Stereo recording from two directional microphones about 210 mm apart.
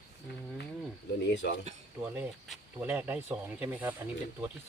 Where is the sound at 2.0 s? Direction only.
10° right (ahead or behind).